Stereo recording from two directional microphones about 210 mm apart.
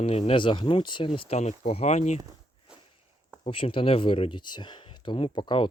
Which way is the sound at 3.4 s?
25° left (ahead or behind).